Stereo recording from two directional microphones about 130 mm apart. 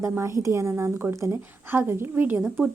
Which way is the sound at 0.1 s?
20° right (ahead or behind).